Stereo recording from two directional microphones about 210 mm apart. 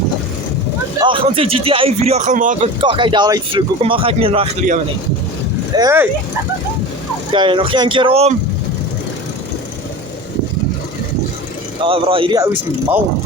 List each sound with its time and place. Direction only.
0.9 s speech: 25° right (ahead or behind)
2.8 s speech: 25° right (ahead or behind)
5.7 s speech: 15° right (ahead or behind)
7.3 s speech: 25° right (ahead or behind)
11.8 s speech: 25° right (ahead or behind)